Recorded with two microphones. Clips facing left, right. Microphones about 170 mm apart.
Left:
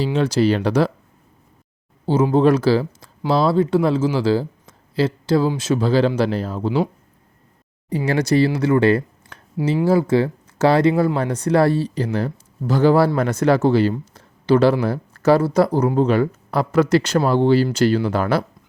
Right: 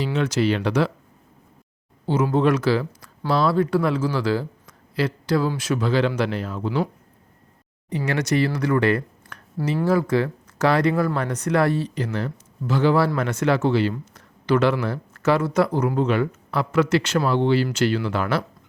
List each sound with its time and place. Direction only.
0.0 s speech: 30° left (ahead or behind)
2.3 s speech: 30° left (ahead or behind)
7.9 s speech: 30° left (ahead or behind)